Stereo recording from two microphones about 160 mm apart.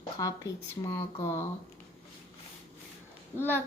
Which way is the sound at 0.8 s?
15° left (ahead or behind).